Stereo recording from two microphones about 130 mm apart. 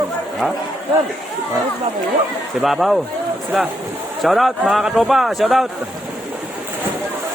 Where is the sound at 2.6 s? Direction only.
Centre (ahead or behind).